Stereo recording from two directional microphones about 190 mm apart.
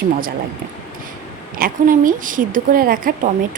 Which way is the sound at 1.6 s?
45° right (ahead or behind).